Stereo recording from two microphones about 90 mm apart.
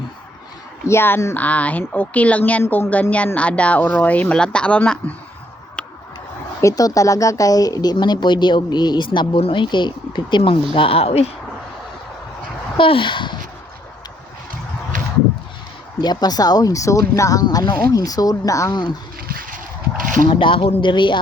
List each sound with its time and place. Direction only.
0.9 s speech: 25° left (ahead or behind)
6.6 s speech: 40° left (ahead or behind); by 10.6 s 70° left (ahead or behind)
10.7 s a woman's voice: 90° left
12.7 s speech: 70° left (ahead or behind)
16.0 s speech: 50° left (ahead or behind)
17.4 s speech: 50° left (ahead or behind)
20.2 s speech: 80° left; by 21.2 s 60° left (ahead or behind)